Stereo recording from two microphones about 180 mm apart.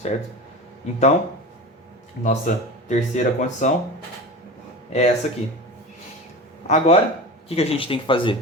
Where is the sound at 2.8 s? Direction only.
40° left (ahead or behind).